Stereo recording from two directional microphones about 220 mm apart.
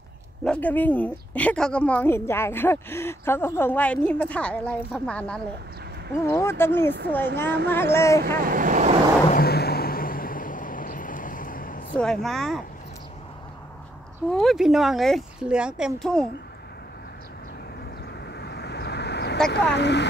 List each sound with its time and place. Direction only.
0.4 s a woman's voice: 5° left (ahead or behind)
7.4 s speech: 50° right (ahead or behind)
7.9 s a woman's voice: 10° left (ahead or behind)
8.4 s speech: 40° right (ahead or behind)
9.3 s vehicle: 45° left (ahead or behind)
11.9 s speech: 5° left (ahead or behind)
14.3 s speech: centre (ahead or behind)
18.4 s vehicle: 50° left (ahead or behind)
19.5 s speech: 50° left (ahead or behind)